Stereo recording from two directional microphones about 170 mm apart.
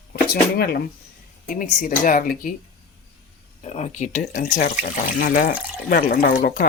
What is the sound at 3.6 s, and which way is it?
Speech, 40° left (ahead or behind).